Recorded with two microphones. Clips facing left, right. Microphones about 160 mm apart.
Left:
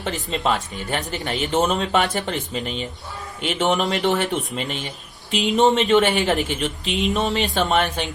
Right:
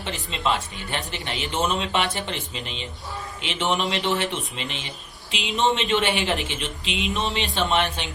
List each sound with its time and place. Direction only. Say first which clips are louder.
0.0 s speech: left 4 dB; 40° left (ahead or behind)